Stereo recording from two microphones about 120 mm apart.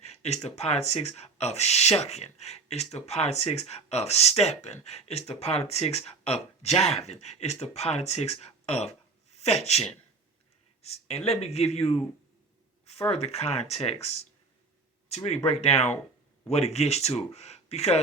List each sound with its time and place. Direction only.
0.0 s speech: 65° left (ahead or behind)
9.3 s a sound: 60° left (ahead or behind)
10.8 s speech: 60° left (ahead or behind)
13.1 s speech: 60° left (ahead or behind)